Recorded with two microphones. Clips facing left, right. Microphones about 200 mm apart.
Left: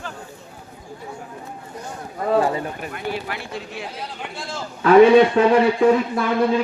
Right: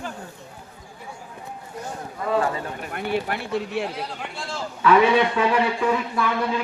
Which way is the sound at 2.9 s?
60° right (ahead or behind).